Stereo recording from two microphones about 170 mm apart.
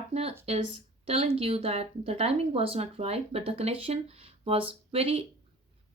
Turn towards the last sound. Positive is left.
turn(degrees=-30)  # may be behind; listen again after turning